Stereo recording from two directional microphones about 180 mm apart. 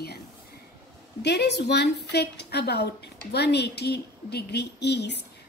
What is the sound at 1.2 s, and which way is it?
A woman's voice, 70° left (ahead or behind).